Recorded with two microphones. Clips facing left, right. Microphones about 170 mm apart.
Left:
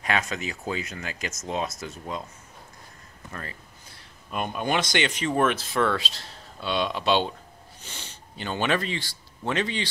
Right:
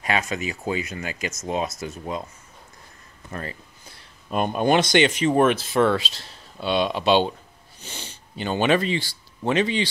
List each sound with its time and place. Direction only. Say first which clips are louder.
0.0 s speech: right 2 dB; 5° right (ahead or behind)
3.3 s speech: right 5 dB; 25° right (ahead or behind)
4.3 s speech: right 7 dB; 35° right (ahead or behind)
8.5 s speech: right 5 dB; 20° right (ahead or behind)